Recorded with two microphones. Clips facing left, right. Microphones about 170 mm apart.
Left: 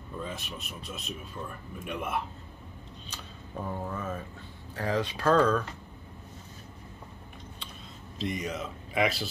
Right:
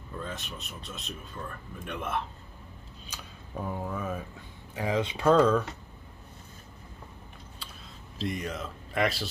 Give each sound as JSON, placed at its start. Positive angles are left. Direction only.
{"t": 0.2, "sound": "speech", "side_deg": 5}
{"t": 3.1, "sound": "speech", "side_deg": -5}
{"t": 4.7, "sound": "speech", "side_deg": -15}
{"t": 8.2, "sound": "speech", "side_deg": 0}